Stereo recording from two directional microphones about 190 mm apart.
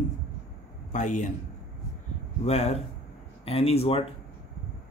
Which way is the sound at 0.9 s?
40° left (ahead or behind).